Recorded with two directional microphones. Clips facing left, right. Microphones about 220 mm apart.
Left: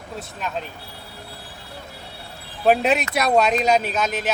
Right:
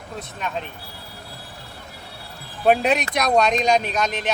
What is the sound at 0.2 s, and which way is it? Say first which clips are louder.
Speech: even; centre (ahead or behind).